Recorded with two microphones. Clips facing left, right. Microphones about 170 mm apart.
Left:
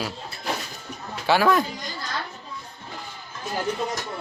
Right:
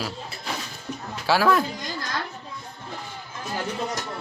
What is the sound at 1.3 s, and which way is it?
Speech, centre (ahead or behind).